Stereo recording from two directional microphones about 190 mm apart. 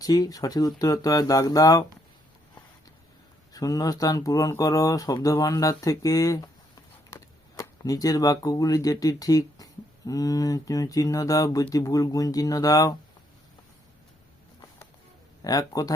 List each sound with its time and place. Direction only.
0.0 s speech: 20° left (ahead or behind)
3.5 s speech: 20° left (ahead or behind)
15.4 s speech: 20° left (ahead or behind)